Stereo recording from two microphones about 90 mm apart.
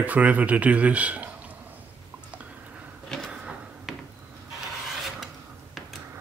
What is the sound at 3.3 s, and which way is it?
Drawer open or close, 5° right (ahead or behind).